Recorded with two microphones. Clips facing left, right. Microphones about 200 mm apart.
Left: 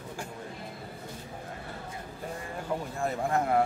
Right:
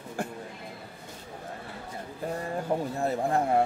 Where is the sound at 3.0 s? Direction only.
30° right (ahead or behind).